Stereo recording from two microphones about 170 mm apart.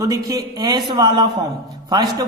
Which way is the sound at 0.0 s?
20° right (ahead or behind).